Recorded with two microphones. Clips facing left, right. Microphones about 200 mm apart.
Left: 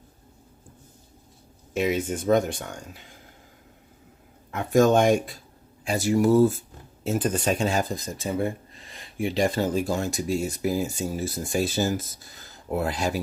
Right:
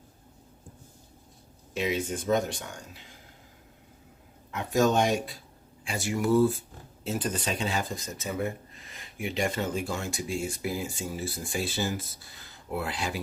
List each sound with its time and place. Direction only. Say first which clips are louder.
1.7 s speech: left 4 dB; 50° left (ahead or behind)
4.5 s speech: left 5 dB; 50° left (ahead or behind)
5.8 s speech: left 8 dB; 40° left (ahead or behind)